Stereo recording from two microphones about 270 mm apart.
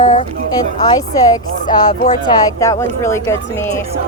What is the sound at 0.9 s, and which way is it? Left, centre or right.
A woman's voice, centre.